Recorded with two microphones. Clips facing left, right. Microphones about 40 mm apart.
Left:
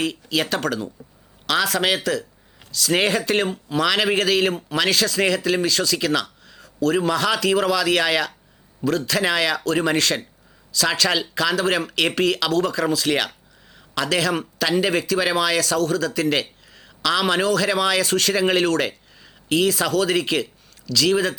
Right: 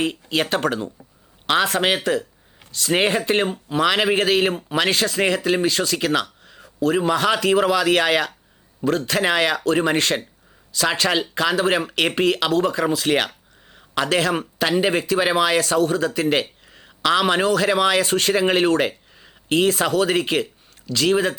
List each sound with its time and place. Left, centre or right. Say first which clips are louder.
0.0 s speech: right 1 dB; right
6.4 s a sound: even; right
6.9 s speech: right 2 dB; right